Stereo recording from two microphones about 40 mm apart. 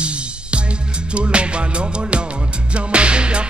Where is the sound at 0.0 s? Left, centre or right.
Right.